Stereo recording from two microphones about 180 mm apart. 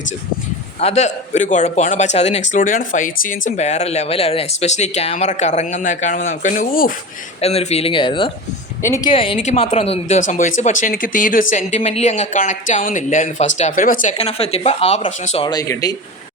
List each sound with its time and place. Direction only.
0.8 s speech: 35° left (ahead or behind)
2.5 s speech: 50° left (ahead or behind)
7.4 s speech: 35° left (ahead or behind)
15.4 s speech: 20° left (ahead or behind)